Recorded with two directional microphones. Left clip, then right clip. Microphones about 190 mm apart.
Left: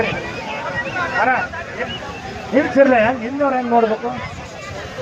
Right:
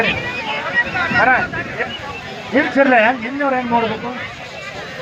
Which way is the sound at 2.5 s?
60° left (ahead or behind).